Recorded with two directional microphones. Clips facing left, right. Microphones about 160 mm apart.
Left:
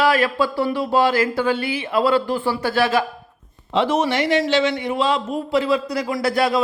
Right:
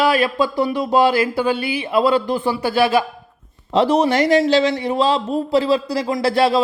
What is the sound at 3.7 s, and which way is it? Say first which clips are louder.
Speech: right 4 dB; 35° right (ahead or behind).